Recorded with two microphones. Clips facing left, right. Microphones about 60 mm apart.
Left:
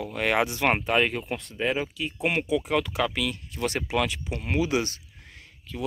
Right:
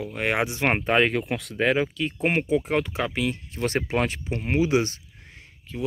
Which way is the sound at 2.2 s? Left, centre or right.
Right.